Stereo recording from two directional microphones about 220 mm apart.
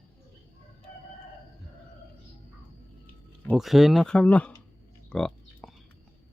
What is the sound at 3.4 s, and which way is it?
Speech, centre (ahead or behind).